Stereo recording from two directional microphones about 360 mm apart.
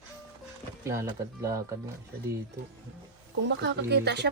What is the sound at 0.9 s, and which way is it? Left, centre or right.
Speech, centre.